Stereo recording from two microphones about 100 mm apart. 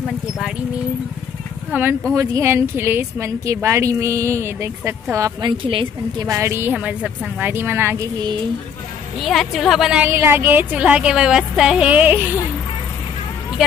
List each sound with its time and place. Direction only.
1.7 s a woman's voice: 20° right (ahead or behind)
6.7 s a woman's voice: 15° right (ahead or behind)
9.2 s a woman's voice: centre (ahead or behind)
10.0 s speech: 25° right (ahead or behind)